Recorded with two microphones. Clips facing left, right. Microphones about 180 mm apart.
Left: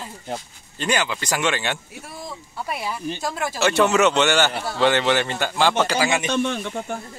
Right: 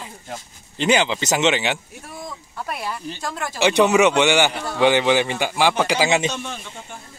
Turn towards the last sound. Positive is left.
turn(degrees=65)  # may be behind; listen again after turning